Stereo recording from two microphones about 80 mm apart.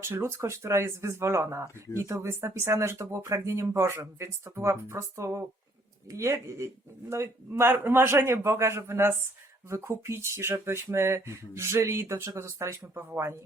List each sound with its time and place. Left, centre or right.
0.0 s speech: right